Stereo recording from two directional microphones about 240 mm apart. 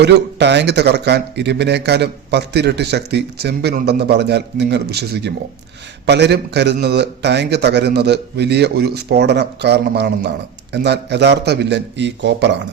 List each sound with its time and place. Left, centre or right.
0.0 s a man's voice: right